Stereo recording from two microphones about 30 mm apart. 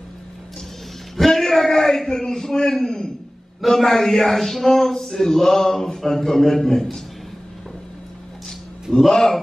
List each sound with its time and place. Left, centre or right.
1.3 s a man's voice: centre
8.9 s speech: left